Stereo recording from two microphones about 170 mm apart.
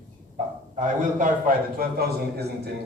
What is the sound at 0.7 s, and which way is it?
Speech, 50° right (ahead or behind).